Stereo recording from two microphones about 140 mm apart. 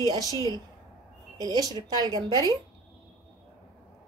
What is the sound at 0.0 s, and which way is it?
Speech, 30° right (ahead or behind).